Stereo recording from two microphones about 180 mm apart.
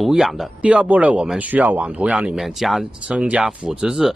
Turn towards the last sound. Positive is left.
turn(degrees=-5)  # may be behind; listen again after turning